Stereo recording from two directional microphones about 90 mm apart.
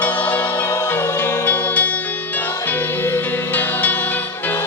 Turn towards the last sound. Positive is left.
turn(degrees=20)  # may be behind; listen again after turning